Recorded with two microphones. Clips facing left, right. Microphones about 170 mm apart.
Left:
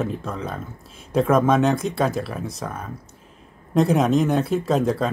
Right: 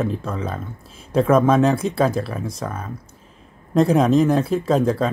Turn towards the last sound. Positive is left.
turn(degrees=0)  # may be behind; listen again after turning